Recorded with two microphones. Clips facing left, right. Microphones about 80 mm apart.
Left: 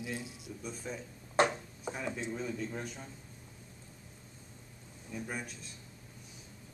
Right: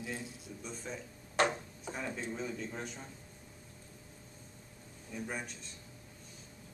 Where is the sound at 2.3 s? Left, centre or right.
Centre.